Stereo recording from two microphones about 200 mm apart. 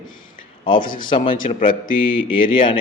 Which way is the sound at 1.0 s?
25° left (ahead or behind).